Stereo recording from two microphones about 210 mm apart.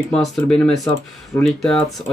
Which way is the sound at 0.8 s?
20° left (ahead or behind).